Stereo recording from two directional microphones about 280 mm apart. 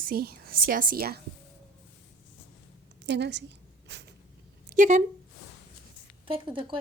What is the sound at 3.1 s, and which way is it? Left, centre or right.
Speech, right.